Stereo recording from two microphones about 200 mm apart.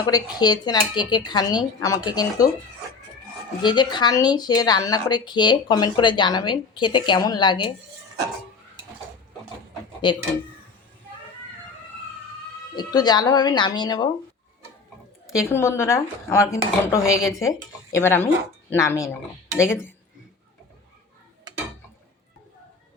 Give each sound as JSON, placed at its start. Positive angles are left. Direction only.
{"t": 0.0, "sound": "speech", "side_deg": 20}
{"t": 3.6, "sound": "speech", "side_deg": 20}
{"t": 10.0, "sound": "speech", "side_deg": 25}
{"t": 12.7, "sound": "speech", "side_deg": 20}
{"t": 15.3, "sound": "speech", "side_deg": 15}